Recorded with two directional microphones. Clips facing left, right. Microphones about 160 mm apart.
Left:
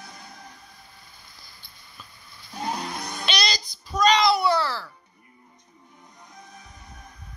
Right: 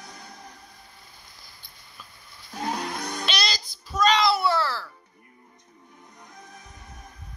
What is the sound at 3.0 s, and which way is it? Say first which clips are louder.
Music: right 2 dB; 10° left (ahead or behind).